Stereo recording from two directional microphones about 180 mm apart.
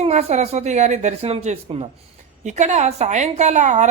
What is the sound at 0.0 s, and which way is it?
A woman's voice, 35° right (ahead or behind).